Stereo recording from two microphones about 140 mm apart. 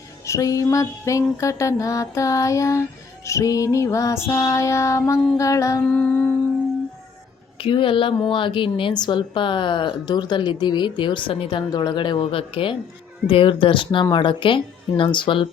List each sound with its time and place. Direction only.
0.3 s mantra: 25° left (ahead or behind)
5.8 s music: 10° left (ahead or behind)
7.6 s a woman's voice: 40° left (ahead or behind)